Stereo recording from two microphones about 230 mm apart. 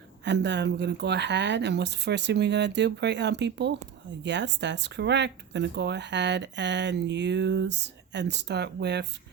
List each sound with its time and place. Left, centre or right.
0.3 s speech: right